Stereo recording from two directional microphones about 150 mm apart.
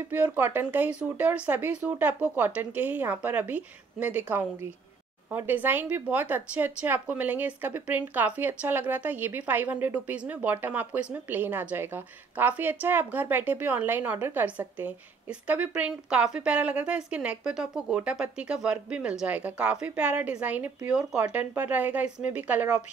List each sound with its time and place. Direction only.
0.1 s speech: 10° right (ahead or behind)